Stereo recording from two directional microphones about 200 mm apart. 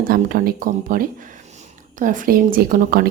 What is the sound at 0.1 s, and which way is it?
Speech, 45° right (ahead or behind).